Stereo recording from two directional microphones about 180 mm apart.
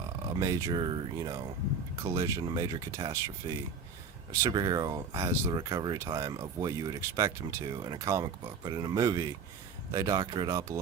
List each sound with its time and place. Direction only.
0.3 s speech: 20° right (ahead or behind)